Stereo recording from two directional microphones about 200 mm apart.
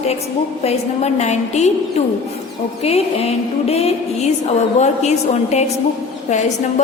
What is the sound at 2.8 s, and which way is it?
A woman's voice, 30° left (ahead or behind).